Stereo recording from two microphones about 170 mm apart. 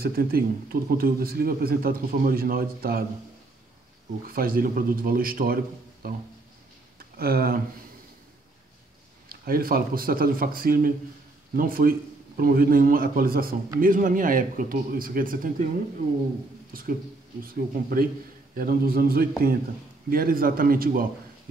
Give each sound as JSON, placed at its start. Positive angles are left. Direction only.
{"t": 0.0, "sound": "speech", "side_deg": -60}
{"t": 4.3, "sound": "speech", "side_deg": -60}
{"t": 9.3, "sound": "speech", "side_deg": -60}
{"t": 17.4, "sound": "speech", "side_deg": -55}